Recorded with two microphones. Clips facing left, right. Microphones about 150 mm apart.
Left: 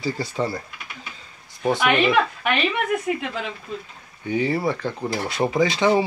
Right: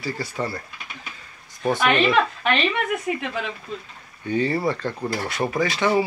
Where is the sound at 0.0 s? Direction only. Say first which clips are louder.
Left 3 dB; 15° left (ahead or behind).